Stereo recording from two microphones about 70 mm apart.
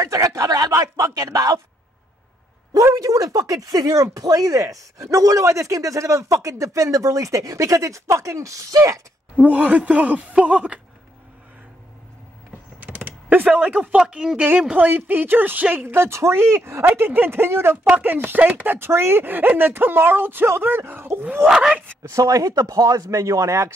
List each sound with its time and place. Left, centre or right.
0.0 s speech: right
2.7 s speech: right
9.4 s speech: right
12.8 s a sound: right
13.6 s speech: centre
14.3 s speech: right
14.9 s speech: right
21.5 s speech: centre
22.0 s speech: right
23.0 s speech: right